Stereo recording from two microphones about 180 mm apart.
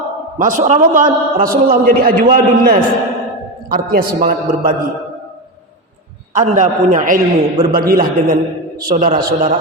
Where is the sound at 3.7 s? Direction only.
55° right (ahead or behind).